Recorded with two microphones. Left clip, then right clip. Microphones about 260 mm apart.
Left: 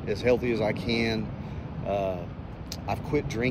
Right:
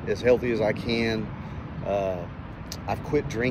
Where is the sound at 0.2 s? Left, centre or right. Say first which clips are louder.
Right 3 dB; centre.